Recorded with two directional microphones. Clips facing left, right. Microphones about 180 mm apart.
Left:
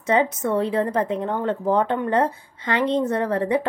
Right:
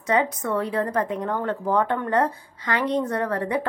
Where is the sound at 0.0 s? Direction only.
25° left (ahead or behind).